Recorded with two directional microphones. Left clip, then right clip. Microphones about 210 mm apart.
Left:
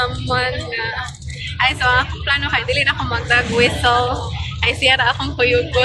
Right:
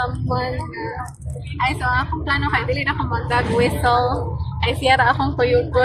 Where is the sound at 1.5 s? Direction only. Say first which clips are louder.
Left 5 dB; 5° right (ahead or behind).